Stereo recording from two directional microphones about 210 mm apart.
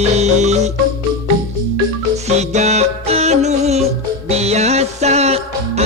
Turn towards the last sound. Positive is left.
turn(degrees=-30)  # may be behind; listen again after turning